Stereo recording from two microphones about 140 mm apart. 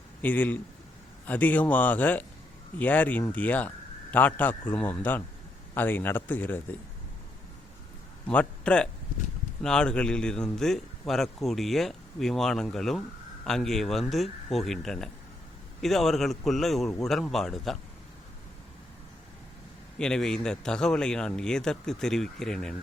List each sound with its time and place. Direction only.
0.2 s a man's voice: 10° left (ahead or behind)
8.3 s a man's voice: 10° left (ahead or behind)
20.0 s a man's voice: 5° left (ahead or behind)